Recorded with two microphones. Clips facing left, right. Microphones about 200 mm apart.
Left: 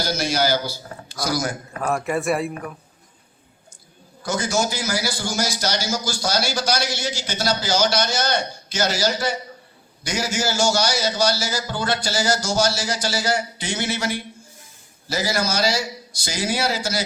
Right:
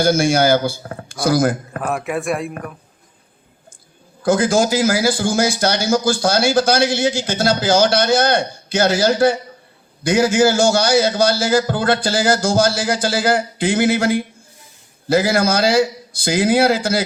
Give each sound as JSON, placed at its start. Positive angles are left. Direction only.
{"t": 0.0, "sound": "speech", "side_deg": -50}
{"t": 1.8, "sound": "speech", "side_deg": 0}
{"t": 4.2, "sound": "a man's voice", "side_deg": -55}
{"t": 4.5, "sound": "speech", "side_deg": -90}
{"t": 4.9, "sound": "a man's voice", "side_deg": -50}